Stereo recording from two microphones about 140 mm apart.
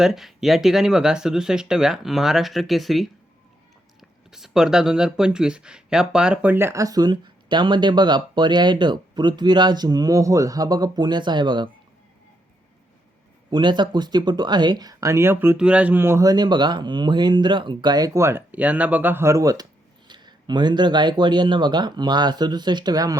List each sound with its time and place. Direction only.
0.0 s speech: centre (ahead or behind)
4.3 s speech: 5° right (ahead or behind); by 11.7 s 35° right (ahead or behind)
13.5 s speech: 35° right (ahead or behind)